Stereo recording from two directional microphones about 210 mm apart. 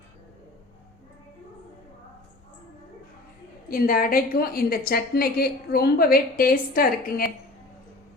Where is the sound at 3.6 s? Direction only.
45° left (ahead or behind).